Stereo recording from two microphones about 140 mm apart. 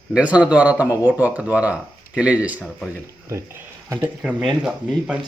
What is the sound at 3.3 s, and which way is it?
Speech, 20° right (ahead or behind).